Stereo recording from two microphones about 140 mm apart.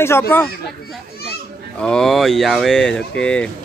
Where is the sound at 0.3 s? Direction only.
15° left (ahead or behind).